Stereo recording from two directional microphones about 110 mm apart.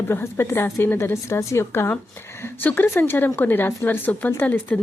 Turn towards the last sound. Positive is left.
turn(degrees=15)  # may be behind; listen again after turning